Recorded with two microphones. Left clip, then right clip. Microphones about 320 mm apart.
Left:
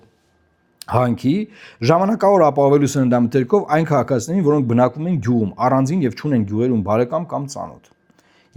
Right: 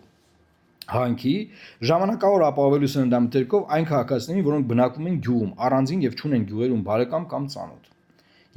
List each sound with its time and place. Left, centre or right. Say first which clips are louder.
0.8 s speech: left 6 dB; left